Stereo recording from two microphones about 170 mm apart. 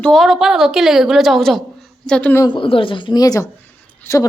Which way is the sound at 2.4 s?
30° left (ahead or behind).